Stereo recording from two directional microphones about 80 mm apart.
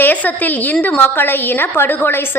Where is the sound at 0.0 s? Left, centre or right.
Left.